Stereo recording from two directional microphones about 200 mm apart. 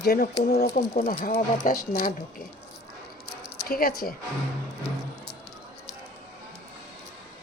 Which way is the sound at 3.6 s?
50° left (ahead or behind).